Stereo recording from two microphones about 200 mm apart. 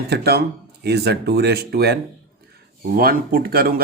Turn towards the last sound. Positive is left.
turn(degrees=-50)  # may be behind; listen again after turning